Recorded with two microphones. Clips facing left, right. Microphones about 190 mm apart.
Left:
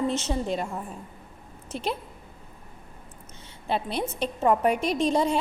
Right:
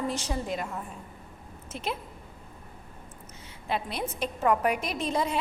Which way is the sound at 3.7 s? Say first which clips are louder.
Left 3 dB; 30° left (ahead or behind).